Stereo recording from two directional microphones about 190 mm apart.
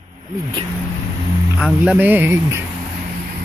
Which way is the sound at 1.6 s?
5° right (ahead or behind).